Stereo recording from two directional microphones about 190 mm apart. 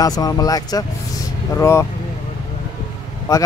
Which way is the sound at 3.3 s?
20° left (ahead or behind).